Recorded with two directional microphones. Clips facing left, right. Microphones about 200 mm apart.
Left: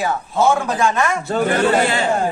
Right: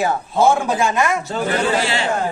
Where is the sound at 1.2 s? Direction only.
55° left (ahead or behind).